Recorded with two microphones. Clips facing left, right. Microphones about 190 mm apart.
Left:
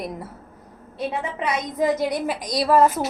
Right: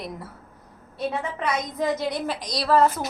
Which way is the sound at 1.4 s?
10° left (ahead or behind).